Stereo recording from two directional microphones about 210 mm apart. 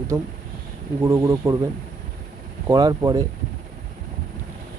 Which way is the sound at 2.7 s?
15° right (ahead or behind).